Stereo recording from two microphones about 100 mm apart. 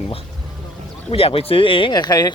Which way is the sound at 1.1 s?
75° left (ahead or behind).